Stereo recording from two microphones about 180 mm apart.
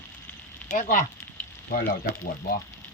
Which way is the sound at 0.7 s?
45° left (ahead or behind).